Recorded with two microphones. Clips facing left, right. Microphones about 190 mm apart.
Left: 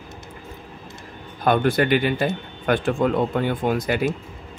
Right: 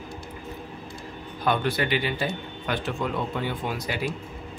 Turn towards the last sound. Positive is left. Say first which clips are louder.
# left 8 dB
turn(degrees=50)  # may be behind; listen again after turning